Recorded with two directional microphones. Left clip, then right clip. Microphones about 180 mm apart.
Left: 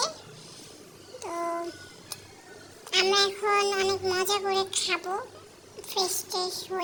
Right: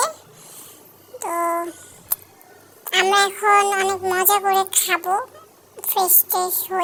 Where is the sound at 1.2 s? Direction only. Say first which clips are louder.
Right 10 dB; 15° right (ahead or behind).